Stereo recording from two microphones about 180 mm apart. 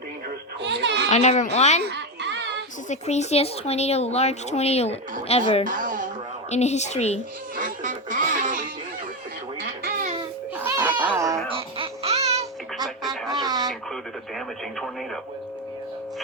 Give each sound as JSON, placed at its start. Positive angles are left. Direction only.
{"t": 0.6, "sound": "a sound", "side_deg": -75}
{"t": 1.1, "sound": "speech", "side_deg": 40}
{"t": 1.9, "sound": "music", "side_deg": -75}
{"t": 2.9, "sound": "speech", "side_deg": 40}
{"t": 5.6, "sound": "a sound", "side_deg": -50}
{"t": 6.5, "sound": "speech", "side_deg": 40}
{"t": 7.5, "sound": "duck", "side_deg": -45}
{"t": 10.6, "sound": "music", "side_deg": -10}
{"t": 10.9, "sound": "a sound", "side_deg": -10}
{"t": 11.4, "sound": "baby laughter", "side_deg": -30}
{"t": 13.3, "sound": "radio", "side_deg": -20}
{"t": 14.3, "sound": "speech", "side_deg": 0}